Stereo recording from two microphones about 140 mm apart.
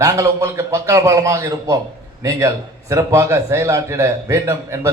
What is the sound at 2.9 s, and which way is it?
A man's voice, 20° right (ahead or behind).